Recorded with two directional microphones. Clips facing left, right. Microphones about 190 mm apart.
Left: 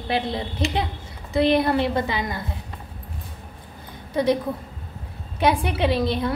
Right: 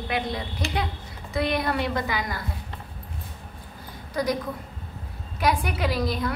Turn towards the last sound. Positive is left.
turn(degrees=30)  # may be behind; listen again after turning